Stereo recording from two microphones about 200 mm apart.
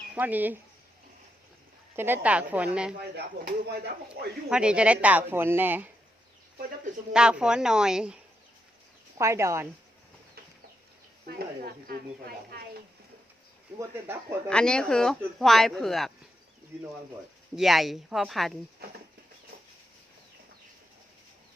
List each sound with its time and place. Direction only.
0.1 s speech: 10° right (ahead or behind)
2.0 s speech: 10° right (ahead or behind)
3.0 s speech: 50° right (ahead or behind)
4.4 s speech: 5° right (ahead or behind)
7.1 s a woman's voice: 5° right (ahead or behind)
9.1 s speech: 15° right (ahead or behind)
11.3 s speech: 50° right (ahead or behind)
13.7 s speech: 15° right (ahead or behind)
14.4 s a woman's voice: 5° left (ahead or behind)
17.6 s a woman's voice: centre (ahead or behind)